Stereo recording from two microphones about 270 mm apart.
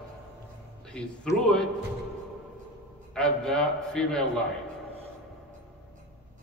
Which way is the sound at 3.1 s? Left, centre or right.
Centre.